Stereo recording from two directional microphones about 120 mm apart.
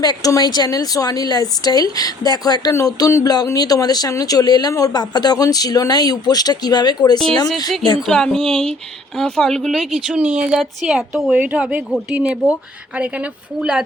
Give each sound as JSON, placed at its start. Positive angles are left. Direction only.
{"t": 0.0, "sound": "speech", "side_deg": 35}
{"t": 8.0, "sound": "a woman's voice", "side_deg": 5}